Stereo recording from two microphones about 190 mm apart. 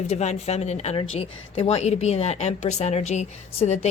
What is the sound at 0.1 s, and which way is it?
A woman's voice, 35° left (ahead or behind).